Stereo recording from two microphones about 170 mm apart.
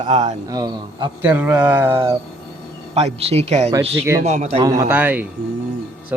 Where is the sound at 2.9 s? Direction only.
35° right (ahead or behind).